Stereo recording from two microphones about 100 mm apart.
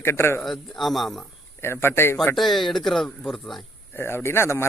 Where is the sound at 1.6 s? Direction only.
25° left (ahead or behind).